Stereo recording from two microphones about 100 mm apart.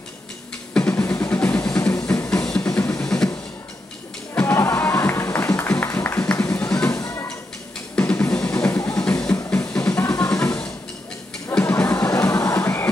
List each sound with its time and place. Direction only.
0.7 s drum: 15° left (ahead or behind)
1.0 s music: 25° left (ahead or behind); by 2.7 s 10° left (ahead or behind)
2.7 s music: 30° left (ahead or behind)
4.4 s music: 25° left (ahead or behind)
6.9 s a sound: 30° left (ahead or behind)
7.9 s music: 20° left (ahead or behind)
8.9 s music: 15° left (ahead or behind)
9.2 s music: 30° left (ahead or behind)